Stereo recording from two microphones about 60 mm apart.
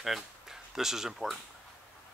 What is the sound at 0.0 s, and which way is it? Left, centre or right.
Speech, centre.